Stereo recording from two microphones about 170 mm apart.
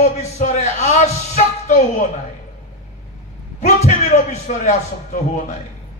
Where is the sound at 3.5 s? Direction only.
40° left (ahead or behind).